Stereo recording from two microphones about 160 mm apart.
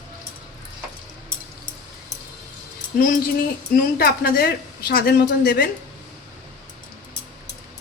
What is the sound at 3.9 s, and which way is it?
Speech, 70° left (ahead or behind).